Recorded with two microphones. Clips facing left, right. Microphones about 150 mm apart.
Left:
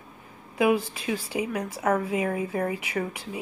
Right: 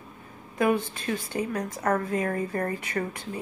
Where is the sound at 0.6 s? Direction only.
10° left (ahead or behind).